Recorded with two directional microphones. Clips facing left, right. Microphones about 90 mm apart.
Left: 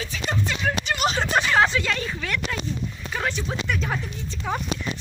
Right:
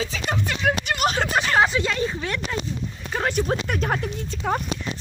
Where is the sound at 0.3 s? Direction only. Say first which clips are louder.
Right 1 dB; 55° right (ahead or behind).